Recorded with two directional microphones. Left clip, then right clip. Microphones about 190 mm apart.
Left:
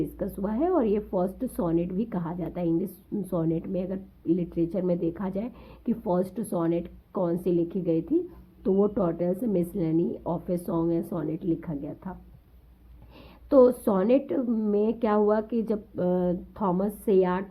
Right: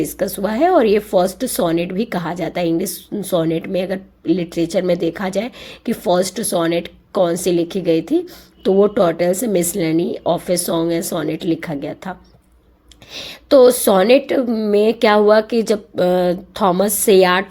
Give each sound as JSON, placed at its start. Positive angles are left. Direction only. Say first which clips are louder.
{"t": 0.4, "sound": "a woman's voice", "louder": "right 12 dB", "side_deg": -25}
{"t": 13.1, "sound": "a woman's voice", "louder": "right 9 dB", "side_deg": -25}